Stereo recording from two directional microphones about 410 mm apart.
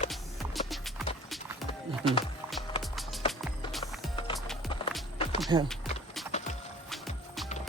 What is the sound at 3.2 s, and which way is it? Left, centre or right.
Music, centre.